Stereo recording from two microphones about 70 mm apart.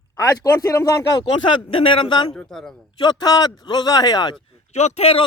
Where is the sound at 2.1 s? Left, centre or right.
Left.